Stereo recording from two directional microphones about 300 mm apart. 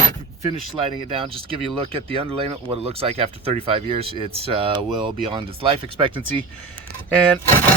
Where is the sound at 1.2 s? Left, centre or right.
Centre.